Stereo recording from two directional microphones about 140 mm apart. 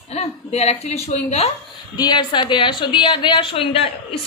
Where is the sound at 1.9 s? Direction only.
30° left (ahead or behind).